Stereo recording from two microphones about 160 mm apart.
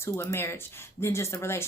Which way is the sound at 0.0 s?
15° left (ahead or behind).